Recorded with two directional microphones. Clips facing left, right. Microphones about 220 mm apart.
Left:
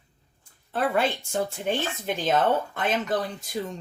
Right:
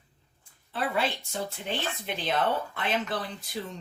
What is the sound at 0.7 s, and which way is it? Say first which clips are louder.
Speech: left 5 dB; 50° left (ahead or behind).